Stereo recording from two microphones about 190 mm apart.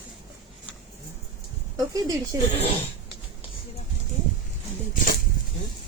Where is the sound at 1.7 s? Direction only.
20° right (ahead or behind).